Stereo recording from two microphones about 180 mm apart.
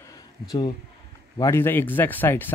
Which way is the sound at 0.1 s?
20° left (ahead or behind).